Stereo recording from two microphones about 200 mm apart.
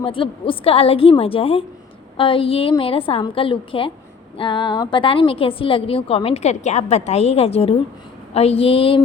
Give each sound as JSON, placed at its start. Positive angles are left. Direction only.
{"t": 0.0, "sound": "a woman's voice", "side_deg": 25}